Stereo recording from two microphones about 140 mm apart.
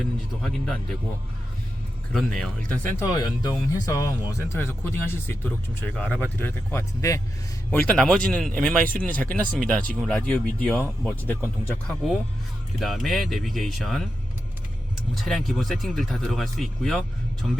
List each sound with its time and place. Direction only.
0.4 s speech: 5° left (ahead or behind)
2.1 s speech: centre (ahead or behind)
3.0 s speech: 25° left (ahead or behind)
7.7 s speech: 5° left (ahead or behind)
11.3 s speech: 15° right (ahead or behind)
11.7 s speech: 5° left (ahead or behind)
15.1 s speech: centre (ahead or behind)